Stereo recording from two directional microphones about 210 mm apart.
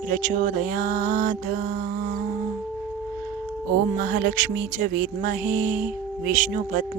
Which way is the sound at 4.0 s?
45° right (ahead or behind).